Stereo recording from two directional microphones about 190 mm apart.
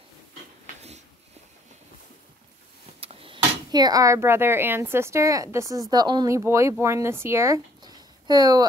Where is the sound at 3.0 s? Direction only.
30° right (ahead or behind).